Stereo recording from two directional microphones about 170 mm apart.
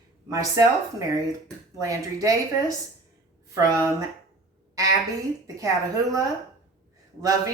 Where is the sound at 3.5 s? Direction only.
20° right (ahead or behind).